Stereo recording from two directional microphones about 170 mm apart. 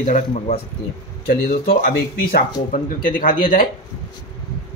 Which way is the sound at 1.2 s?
60° left (ahead or behind).